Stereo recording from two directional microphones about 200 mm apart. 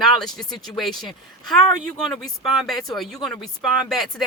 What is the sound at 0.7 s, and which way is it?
Speech, centre (ahead or behind).